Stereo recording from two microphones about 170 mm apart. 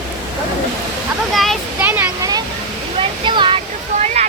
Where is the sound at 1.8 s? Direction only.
10° right (ahead or behind).